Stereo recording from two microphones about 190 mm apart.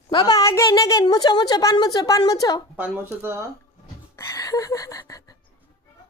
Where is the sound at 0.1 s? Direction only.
20° left (ahead or behind).